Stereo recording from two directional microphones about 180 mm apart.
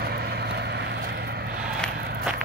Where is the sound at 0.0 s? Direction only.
60° right (ahead or behind).